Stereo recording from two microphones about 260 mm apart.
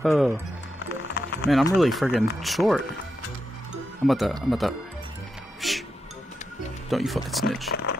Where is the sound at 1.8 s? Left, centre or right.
Centre.